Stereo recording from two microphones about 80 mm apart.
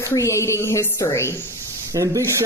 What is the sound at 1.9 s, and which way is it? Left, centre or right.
Speech, right.